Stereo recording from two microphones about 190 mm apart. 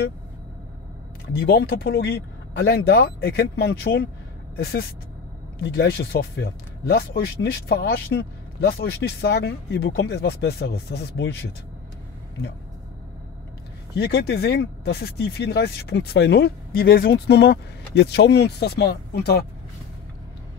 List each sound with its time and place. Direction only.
1.4 s speech: 55° left (ahead or behind)
13.9 s speech: 60° left (ahead or behind)